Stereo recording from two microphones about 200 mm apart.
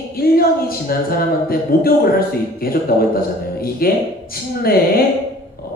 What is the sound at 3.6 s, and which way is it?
Speech, 50° left (ahead or behind).